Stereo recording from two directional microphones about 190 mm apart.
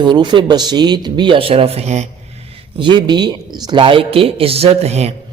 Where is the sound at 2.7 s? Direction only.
25° right (ahead or behind).